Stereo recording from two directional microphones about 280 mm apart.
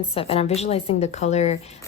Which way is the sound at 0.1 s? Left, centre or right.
Left.